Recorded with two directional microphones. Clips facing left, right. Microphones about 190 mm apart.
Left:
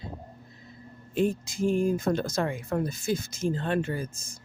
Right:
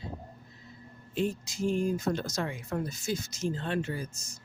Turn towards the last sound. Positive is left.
turn(degrees=55)  # may be behind; listen again after turning